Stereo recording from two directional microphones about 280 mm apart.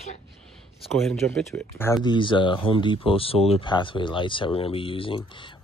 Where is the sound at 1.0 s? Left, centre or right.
Centre.